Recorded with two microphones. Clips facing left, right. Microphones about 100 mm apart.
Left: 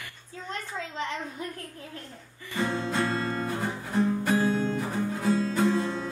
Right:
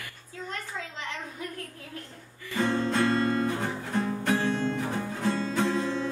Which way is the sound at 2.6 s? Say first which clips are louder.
Right 2 dB; 5° left (ahead or behind).